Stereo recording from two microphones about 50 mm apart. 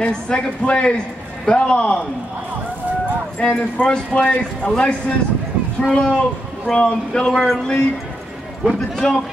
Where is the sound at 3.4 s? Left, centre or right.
Centre.